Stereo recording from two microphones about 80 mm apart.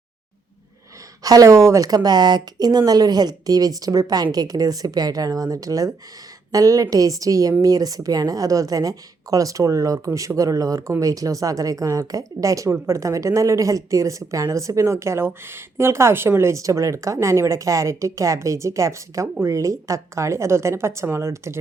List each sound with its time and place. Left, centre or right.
1.2 s speech: right
2.0 s speech: right